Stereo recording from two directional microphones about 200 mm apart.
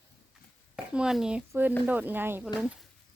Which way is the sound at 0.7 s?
5° right (ahead or behind).